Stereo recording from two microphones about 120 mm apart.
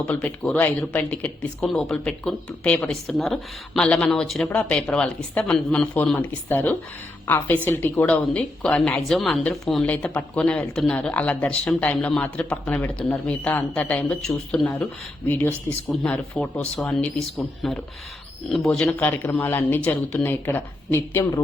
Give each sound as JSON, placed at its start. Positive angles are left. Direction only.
{"t": 0.0, "sound": "a woman's voice", "side_deg": 10}
{"t": 1.6, "sound": "a woman's voice", "side_deg": 5}
{"t": 15.3, "sound": "a woman's voice", "side_deg": 15}
{"t": 18.9, "sound": "a woman's voice", "side_deg": 15}